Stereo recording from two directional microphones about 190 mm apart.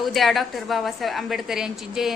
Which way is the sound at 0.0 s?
Centre (ahead or behind).